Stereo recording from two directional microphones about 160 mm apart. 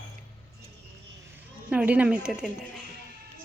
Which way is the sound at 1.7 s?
10° right (ahead or behind).